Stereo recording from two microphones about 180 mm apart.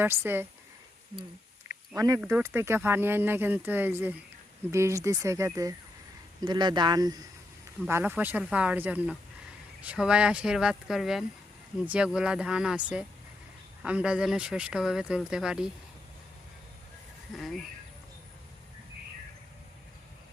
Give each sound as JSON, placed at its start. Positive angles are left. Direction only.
{"t": 0.0, "sound": "speech", "side_deg": -15}
{"t": 1.9, "sound": "speech", "side_deg": -20}
{"t": 7.9, "sound": "speech", "side_deg": -10}
{"t": 17.3, "sound": "speech", "side_deg": 0}